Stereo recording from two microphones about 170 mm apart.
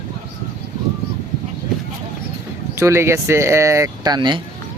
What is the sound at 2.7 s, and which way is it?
Speech, 15° right (ahead or behind).